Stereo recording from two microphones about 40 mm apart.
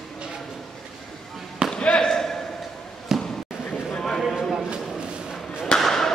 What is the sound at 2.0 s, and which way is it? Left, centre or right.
Basketball bounce, centre.